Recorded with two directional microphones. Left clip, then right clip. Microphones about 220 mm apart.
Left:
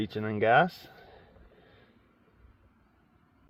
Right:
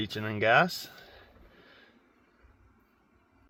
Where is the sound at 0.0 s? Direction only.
10° left (ahead or behind).